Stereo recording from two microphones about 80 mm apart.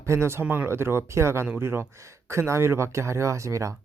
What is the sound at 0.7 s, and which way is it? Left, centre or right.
Speech, right.